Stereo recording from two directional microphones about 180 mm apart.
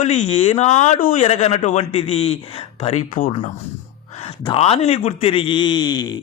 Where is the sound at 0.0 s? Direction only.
35° left (ahead or behind).